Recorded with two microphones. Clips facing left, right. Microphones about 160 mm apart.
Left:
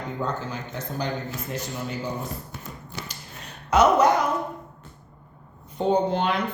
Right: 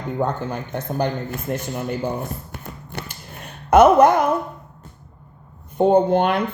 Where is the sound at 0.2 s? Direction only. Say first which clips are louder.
Right 7 dB; 55° right (ahead or behind).